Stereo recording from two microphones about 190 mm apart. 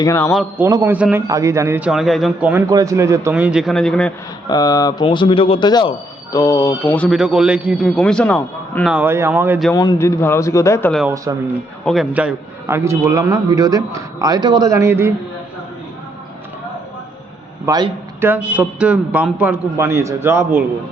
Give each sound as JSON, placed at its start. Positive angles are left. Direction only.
{"t": 0.0, "sound": "a man's voice", "side_deg": 15}
{"t": 0.3, "sound": "a man's voice", "side_deg": -10}
{"t": 1.9, "sound": "a man's voice", "side_deg": 0}
{"t": 4.4, "sound": "a man's voice", "side_deg": 20}
{"t": 6.9, "sound": "a man's voice", "side_deg": 0}
{"t": 8.9, "sound": "a man's voice", "side_deg": -10}
{"t": 9.7, "sound": "a man's voice", "side_deg": 20}
{"t": 11.3, "sound": "a man's voice", "side_deg": -15}
{"t": 11.9, "sound": "a man's voice", "side_deg": -5}
{"t": 17.7, "sound": "a man's voice", "side_deg": -15}